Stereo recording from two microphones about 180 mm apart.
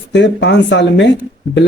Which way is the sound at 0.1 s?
75° left (ahead or behind).